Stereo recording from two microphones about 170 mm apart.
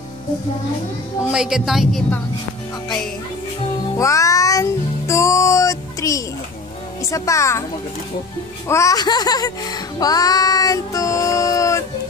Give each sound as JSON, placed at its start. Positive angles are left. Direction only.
{"t": 1.3, "sound": "a woman's voice", "side_deg": -5}
{"t": 3.8, "sound": "music", "side_deg": 20}
{"t": 7.0, "sound": "a woman's voice", "side_deg": 20}
{"t": 8.6, "sound": "music", "side_deg": 15}